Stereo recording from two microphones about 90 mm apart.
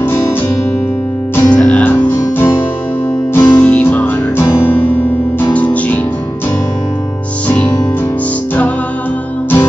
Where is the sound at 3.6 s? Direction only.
15° left (ahead or behind).